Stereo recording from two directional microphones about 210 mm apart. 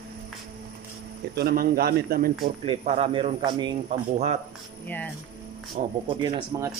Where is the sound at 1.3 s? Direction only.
45° right (ahead or behind).